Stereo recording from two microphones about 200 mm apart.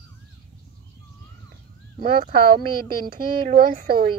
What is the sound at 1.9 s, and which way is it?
Speech, 45° right (ahead or behind).